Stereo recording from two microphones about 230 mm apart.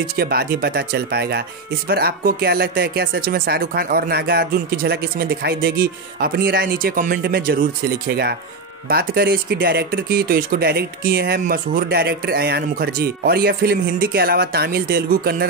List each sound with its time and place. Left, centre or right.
0.1 s speech: right